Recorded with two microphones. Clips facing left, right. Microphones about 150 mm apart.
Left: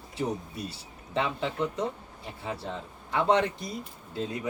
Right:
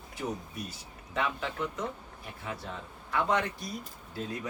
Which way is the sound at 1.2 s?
30° left (ahead or behind).